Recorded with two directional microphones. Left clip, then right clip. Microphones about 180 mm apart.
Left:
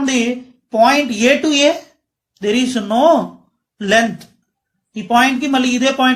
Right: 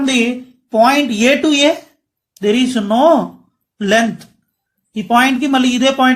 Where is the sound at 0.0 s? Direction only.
35° right (ahead or behind).